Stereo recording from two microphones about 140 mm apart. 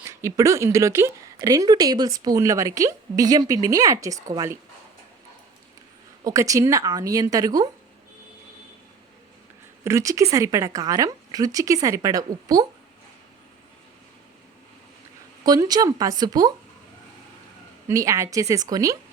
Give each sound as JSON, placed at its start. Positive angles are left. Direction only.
{"t": 0.0, "sound": "a woman's voice", "side_deg": -20}
{"t": 6.2, "sound": "a woman's voice", "side_deg": -25}
{"t": 9.8, "sound": "a woman's voice", "side_deg": -20}
{"t": 15.4, "sound": "a woman's voice", "side_deg": -25}
{"t": 17.8, "sound": "a woman's voice", "side_deg": -25}